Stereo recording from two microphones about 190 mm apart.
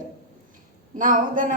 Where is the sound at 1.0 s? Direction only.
45° right (ahead or behind).